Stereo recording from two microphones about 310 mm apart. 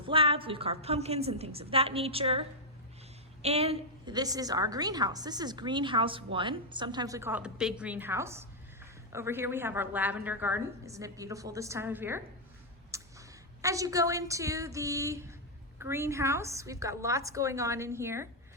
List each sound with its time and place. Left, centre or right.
0.1 s a woman's voice: centre